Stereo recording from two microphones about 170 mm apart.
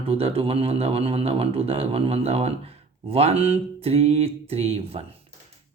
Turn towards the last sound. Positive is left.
turn(degrees=-35)  # may be behind; listen again after turning